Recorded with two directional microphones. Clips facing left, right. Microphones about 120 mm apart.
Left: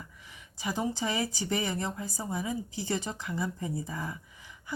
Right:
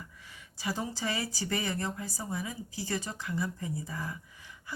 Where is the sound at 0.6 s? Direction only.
20° left (ahead or behind).